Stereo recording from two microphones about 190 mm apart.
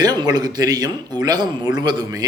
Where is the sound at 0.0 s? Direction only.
20° right (ahead or behind).